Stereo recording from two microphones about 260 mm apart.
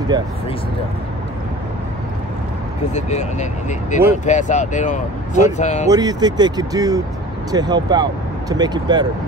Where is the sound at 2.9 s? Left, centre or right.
Left.